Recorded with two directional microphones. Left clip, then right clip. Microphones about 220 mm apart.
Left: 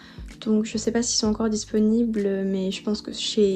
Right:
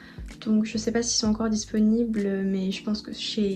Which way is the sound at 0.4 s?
10° left (ahead or behind).